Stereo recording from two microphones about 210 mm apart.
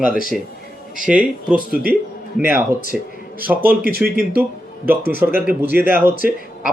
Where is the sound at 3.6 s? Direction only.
45° right (ahead or behind).